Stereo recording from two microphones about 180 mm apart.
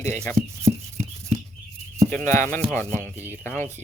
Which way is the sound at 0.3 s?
35° right (ahead or behind).